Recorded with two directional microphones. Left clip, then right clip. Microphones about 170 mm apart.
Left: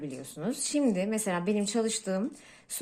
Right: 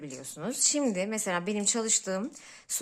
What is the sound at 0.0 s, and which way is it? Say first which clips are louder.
Speech: left 2 dB; 15° right (ahead or behind).